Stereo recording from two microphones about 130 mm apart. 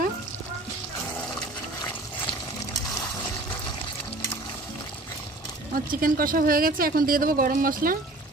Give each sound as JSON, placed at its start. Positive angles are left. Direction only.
{"t": 5.9, "sound": "speech", "side_deg": -90}